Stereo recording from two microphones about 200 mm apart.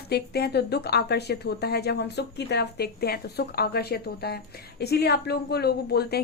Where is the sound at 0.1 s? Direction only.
55° left (ahead or behind).